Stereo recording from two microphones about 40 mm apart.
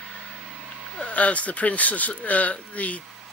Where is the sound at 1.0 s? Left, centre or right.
Left.